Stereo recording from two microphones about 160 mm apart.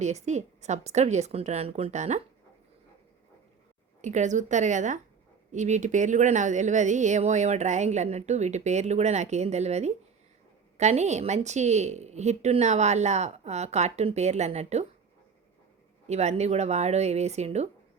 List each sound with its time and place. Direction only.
0.0 s speech: 45° right (ahead or behind)
4.0 s speech: 50° right (ahead or behind)
16.0 s speech: 45° right (ahead or behind)